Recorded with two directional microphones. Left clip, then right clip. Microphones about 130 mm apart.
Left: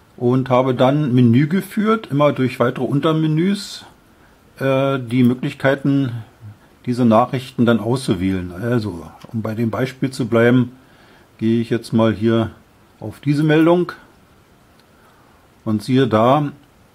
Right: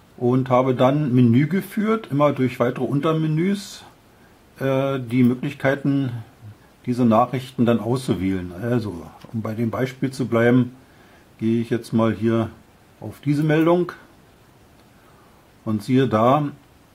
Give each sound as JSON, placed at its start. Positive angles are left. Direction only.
{"t": 0.2, "sound": "speech", "side_deg": 35}
{"t": 15.6, "sound": "speech", "side_deg": 35}